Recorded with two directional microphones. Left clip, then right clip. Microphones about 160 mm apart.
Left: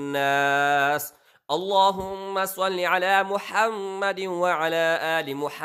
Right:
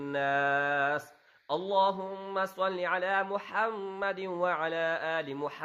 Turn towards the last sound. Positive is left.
turn(degrees=30)  # may be behind; listen again after turning